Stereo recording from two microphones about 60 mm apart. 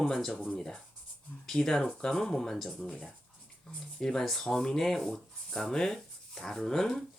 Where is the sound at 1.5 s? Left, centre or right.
Centre.